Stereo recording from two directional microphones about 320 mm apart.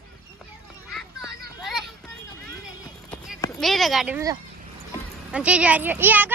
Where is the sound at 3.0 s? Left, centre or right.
Centre.